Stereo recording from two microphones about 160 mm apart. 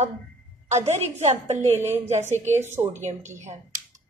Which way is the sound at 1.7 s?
15° right (ahead or behind).